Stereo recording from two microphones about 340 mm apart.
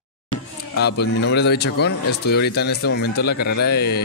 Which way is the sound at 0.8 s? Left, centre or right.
Left.